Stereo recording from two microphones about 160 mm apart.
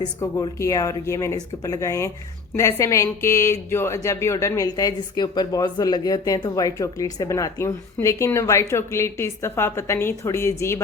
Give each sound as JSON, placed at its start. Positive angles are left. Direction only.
{"t": 0.2, "sound": "speech", "side_deg": 20}